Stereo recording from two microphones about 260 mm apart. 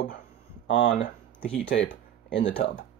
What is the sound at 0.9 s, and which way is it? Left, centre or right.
Speech, left.